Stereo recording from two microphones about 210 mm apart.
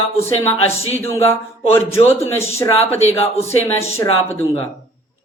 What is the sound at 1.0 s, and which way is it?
A man's voice, 10° left (ahead or behind).